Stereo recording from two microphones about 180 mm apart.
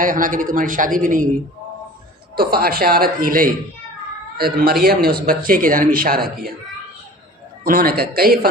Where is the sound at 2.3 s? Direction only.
55° right (ahead or behind).